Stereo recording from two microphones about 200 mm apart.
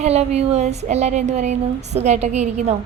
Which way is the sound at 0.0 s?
35° right (ahead or behind).